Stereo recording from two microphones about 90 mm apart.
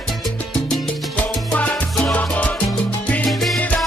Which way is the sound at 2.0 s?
15° left (ahead or behind).